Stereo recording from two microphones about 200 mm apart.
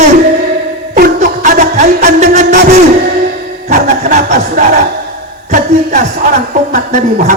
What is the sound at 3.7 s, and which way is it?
Speech, 40° right (ahead or behind).